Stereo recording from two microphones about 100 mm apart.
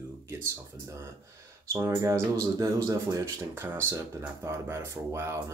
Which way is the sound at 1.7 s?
30° right (ahead or behind).